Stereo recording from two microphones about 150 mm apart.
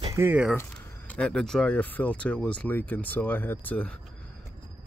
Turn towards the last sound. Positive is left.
turn(degrees=10)  # may be behind; listen again after turning